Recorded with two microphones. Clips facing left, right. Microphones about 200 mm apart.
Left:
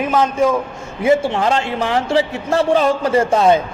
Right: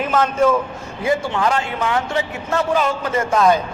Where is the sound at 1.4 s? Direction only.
30° left (ahead or behind).